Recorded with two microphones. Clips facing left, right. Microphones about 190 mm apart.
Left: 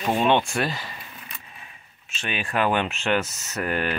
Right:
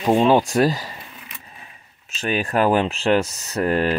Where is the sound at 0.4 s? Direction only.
40° right (ahead or behind).